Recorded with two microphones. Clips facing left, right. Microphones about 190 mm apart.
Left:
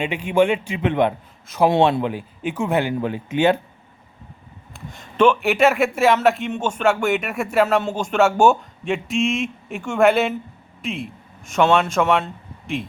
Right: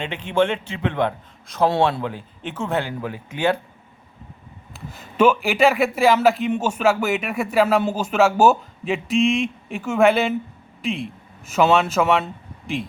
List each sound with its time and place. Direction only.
0.0 s speech: 10° left (ahead or behind)
4.7 s speech: 5° right (ahead or behind)